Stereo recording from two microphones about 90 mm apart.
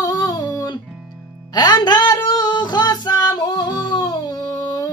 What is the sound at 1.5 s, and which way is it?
Music, 50° left (ahead or behind).